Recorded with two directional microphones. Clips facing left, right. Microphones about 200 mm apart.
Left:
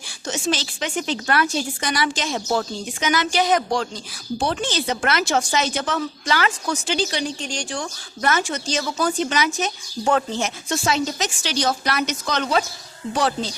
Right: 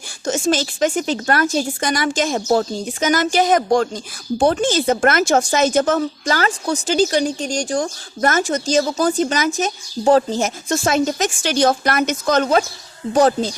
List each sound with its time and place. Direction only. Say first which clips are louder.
0.3 s speech: right 6 dB; 45° right (ahead or behind)